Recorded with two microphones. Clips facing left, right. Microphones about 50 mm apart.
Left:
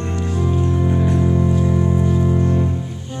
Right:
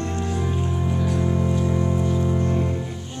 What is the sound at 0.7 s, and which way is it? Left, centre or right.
Music, centre.